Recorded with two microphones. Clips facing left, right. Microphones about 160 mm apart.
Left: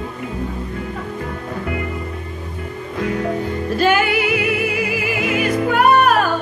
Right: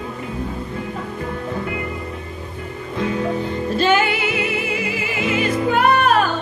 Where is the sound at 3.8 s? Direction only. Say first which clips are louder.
Left 1 dB; 25° right (ahead or behind).